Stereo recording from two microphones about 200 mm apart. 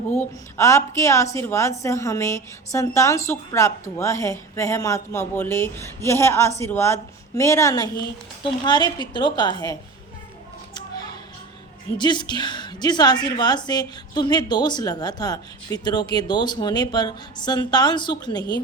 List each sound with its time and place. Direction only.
0.2 s a woman's voice: 10° left (ahead or behind)
10.8 s music: 20° left (ahead or behind)
11.9 s a woman's voice: 20° left (ahead or behind)